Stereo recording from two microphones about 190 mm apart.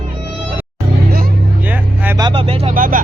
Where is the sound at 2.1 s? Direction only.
25° right (ahead or behind).